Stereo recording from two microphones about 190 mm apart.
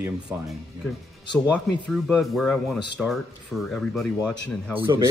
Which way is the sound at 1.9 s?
Centre (ahead or behind).